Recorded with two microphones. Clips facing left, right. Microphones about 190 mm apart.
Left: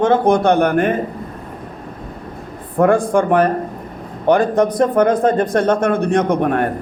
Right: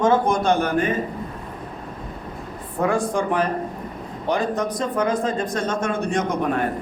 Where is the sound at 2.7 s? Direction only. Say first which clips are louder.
Left 8 dB; 55° left (ahead or behind).